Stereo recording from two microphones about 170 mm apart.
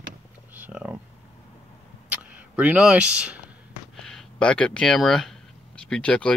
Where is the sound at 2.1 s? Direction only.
10° right (ahead or behind).